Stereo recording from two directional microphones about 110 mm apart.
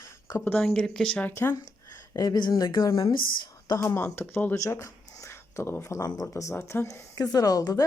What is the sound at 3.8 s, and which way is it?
Speech, 20° left (ahead or behind).